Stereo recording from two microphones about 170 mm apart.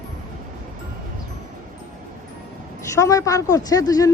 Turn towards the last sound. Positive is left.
turn(degrees=20)  # may be behind; listen again after turning